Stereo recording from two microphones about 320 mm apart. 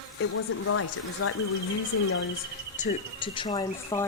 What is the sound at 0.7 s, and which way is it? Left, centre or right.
Speech, left.